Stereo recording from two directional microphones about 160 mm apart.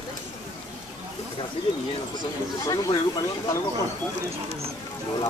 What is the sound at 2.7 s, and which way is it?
Speech, 25° left (ahead or behind).